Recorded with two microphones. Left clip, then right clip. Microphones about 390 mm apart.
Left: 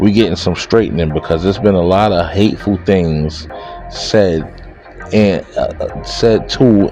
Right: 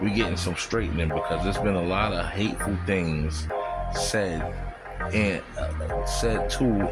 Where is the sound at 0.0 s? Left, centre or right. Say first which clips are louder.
Left 14 dB; right.